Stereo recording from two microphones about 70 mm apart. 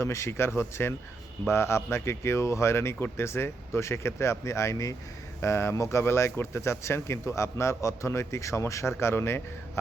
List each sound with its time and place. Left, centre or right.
0.0 s speech: left